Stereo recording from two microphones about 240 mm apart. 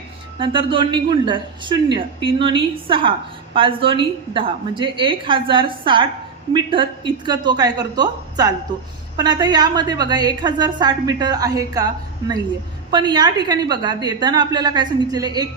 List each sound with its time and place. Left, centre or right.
0.3 s a woman's voice: right
12.9 s a woman's voice: centre